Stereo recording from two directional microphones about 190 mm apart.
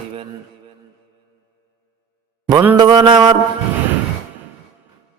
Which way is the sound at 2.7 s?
25° right (ahead or behind).